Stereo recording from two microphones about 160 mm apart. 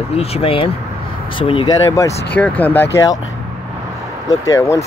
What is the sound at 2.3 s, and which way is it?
Speech, 10° left (ahead or behind).